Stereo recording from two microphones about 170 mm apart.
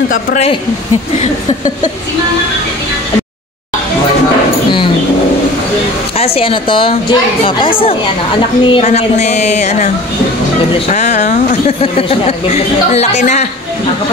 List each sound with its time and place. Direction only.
0.1 s a woman's voice: 50° left (ahead or behind)
6.1 s speech: 35° left (ahead or behind)
10.9 s speech: 45° left (ahead or behind)